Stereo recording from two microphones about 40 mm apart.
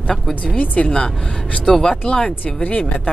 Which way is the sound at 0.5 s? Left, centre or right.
Left.